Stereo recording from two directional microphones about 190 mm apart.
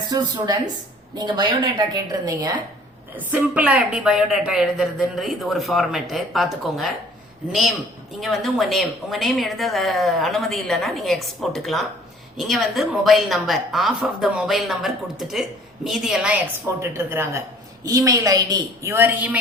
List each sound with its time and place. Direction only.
0.1 s a woman's voice: 20° right (ahead or behind)
3.2 s a woman's voice: 10° right (ahead or behind)